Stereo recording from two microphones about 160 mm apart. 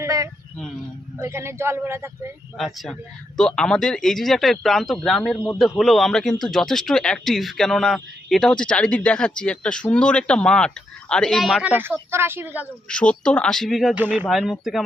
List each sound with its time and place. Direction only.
0.0 s a sound: 20° right (ahead or behind)
1.2 s a woman's voice: 15° right (ahead or behind)
2.6 s a man's voice: centre (ahead or behind)
12.9 s a man's voice: 5° left (ahead or behind)
13.9 s a woman's voice: 10° right (ahead or behind)
14.3 s a man's voice: centre (ahead or behind)